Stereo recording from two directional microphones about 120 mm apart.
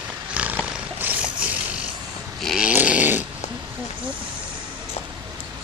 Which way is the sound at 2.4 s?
5° right (ahead or behind).